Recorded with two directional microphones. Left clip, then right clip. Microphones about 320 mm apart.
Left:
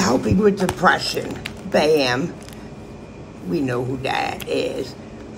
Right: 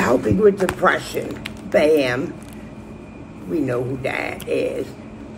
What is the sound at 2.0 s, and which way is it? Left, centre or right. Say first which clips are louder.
Speech: even; centre.